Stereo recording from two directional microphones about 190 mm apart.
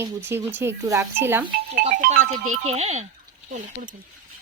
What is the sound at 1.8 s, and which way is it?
Music, 50° right (ahead or behind).